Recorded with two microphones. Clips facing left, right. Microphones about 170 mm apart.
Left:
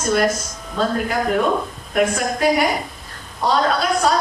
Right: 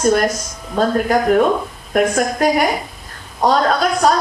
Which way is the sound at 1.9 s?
45° right (ahead or behind).